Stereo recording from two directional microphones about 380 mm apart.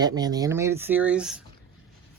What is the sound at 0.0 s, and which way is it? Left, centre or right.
Speech, centre.